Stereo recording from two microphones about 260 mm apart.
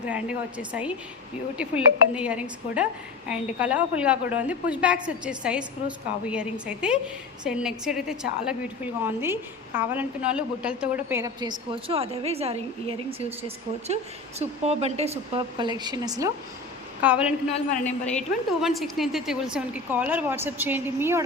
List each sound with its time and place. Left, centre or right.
0.0 s a woman's voice: centre